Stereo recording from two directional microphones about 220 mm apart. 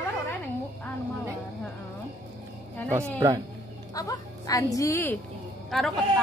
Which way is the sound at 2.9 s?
10° right (ahead or behind).